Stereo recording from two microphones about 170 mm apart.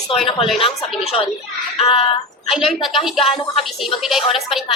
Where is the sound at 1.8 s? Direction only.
35° left (ahead or behind).